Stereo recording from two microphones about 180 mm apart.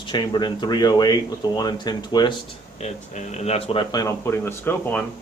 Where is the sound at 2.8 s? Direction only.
40° left (ahead or behind); by 5.0 s 10° left (ahead or behind).